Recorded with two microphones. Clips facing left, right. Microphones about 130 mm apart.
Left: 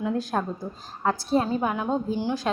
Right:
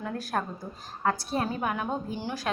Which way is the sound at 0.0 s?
20° left (ahead or behind).